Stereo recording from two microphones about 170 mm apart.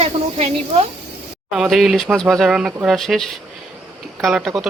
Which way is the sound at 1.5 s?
Centre (ahead or behind).